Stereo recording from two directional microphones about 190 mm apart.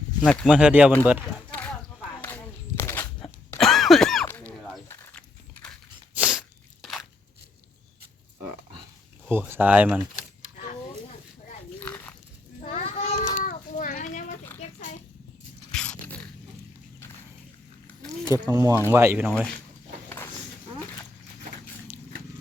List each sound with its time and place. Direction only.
0.2 s speech: 5° left (ahead or behind)
1.5 s a sound: 10° left (ahead or behind)
3.6 s a sound: centre (ahead or behind)
6.1 s sneeze: 5° right (ahead or behind)
6.8 s crunch: centre (ahead or behind)
9.3 s speech: 10° right (ahead or behind)
11.8 s dog: 10° left (ahead or behind)
12.5 s children playing: 30° left (ahead or behind)
13.3 s a sound: 45° left (ahead or behind)
15.7 s dog: 5° left (ahead or behind)
18.3 s speech: 15° right (ahead or behind)